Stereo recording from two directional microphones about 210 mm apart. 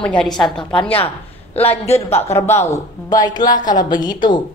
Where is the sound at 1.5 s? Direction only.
30° left (ahead or behind).